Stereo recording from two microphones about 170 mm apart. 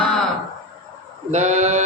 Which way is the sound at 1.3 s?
40° right (ahead or behind).